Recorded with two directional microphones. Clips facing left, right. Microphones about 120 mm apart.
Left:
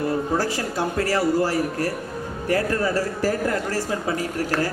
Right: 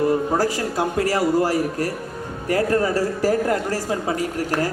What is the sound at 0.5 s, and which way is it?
Speech, 25° right (ahead or behind).